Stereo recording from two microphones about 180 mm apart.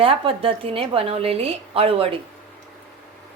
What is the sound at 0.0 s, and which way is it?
A woman's voice, 30° right (ahead or behind).